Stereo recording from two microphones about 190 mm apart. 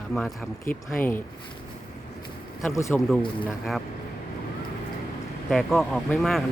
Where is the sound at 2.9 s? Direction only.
Centre (ahead or behind).